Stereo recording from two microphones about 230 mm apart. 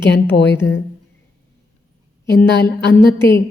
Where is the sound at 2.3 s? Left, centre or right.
Left.